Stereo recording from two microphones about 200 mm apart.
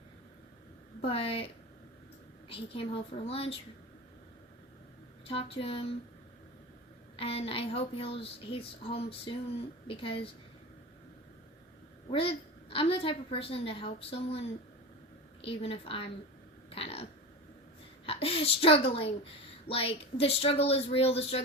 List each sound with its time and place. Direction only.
1.0 s a woman's voice: 30° left (ahead or behind)
2.5 s a woman's voice: 30° left (ahead or behind)
5.2 s a woman's voice: 30° left (ahead or behind)
7.2 s a woman's voice: 30° left (ahead or behind)
12.1 s a woman's voice: 30° left (ahead or behind)
16.6 s a sound: 30° left (ahead or behind)
18.0 s a woman's voice: 30° left (ahead or behind)